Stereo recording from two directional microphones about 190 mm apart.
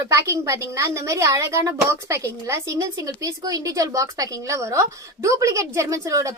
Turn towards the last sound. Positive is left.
turn(degrees=-15)  # may be behind; listen again after turning